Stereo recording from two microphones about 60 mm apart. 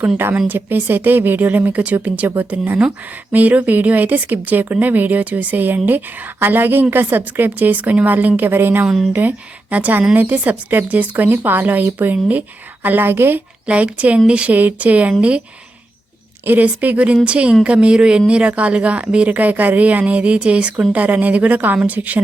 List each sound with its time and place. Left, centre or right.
0.4 s a woman's voice: right
13.7 s speech: right
16.5 s speech: right